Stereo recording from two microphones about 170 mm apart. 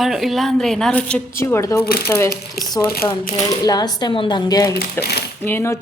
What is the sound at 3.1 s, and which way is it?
Speech, 20° left (ahead or behind).